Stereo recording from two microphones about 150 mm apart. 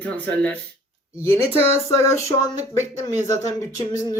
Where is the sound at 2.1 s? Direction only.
20° left (ahead or behind).